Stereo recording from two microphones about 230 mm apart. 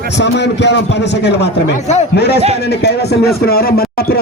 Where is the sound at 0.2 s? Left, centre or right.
Left.